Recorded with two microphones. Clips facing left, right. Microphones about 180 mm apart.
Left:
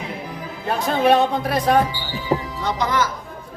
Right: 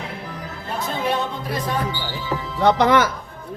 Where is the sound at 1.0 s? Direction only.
80° left.